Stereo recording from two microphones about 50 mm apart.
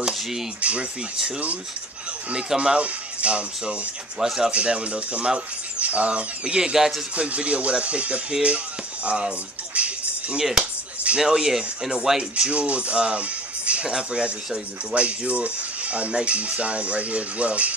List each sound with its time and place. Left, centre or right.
0.0 s speech: centre
0.6 s speech: right
2.3 s speech: centre
7.2 s speech: right
9.8 s music: right
11.2 s speech: centre
12.2 s speech: right
15.0 s speech: right